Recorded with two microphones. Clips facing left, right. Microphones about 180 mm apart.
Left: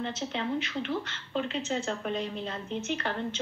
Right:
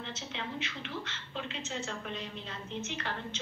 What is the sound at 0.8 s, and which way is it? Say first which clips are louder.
Speech: left 7 dB; 50° left (ahead or behind).